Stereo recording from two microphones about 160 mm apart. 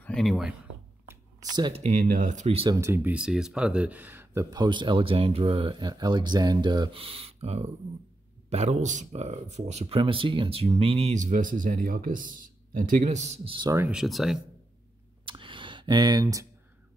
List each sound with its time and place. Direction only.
0.0 s speech: centre (ahead or behind)
1.0 s a sound: 25° right (ahead or behind)
1.7 s speech: 55° right (ahead or behind)
2.7 s speech: 15° right (ahead or behind); by 13.6 s 45° right (ahead or behind)
13.6 s speech: 20° right (ahead or behind)
13.8 s speech: centre (ahead or behind)
15.2 s a sound: 30° right (ahead or behind)